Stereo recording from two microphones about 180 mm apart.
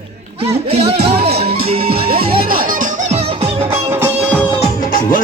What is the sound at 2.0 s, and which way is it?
Music, 55° right (ahead or behind).